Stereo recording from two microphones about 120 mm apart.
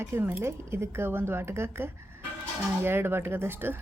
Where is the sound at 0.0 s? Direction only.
20° right (ahead or behind).